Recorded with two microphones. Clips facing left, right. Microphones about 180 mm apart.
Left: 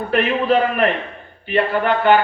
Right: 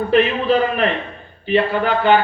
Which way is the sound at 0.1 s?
55° left (ahead or behind).